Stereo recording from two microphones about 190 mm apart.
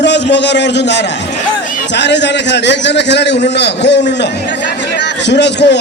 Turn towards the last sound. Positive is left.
turn(degrees=65)  # may be behind; listen again after turning